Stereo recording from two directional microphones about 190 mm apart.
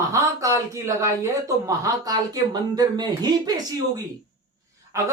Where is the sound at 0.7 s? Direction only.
15° right (ahead or behind).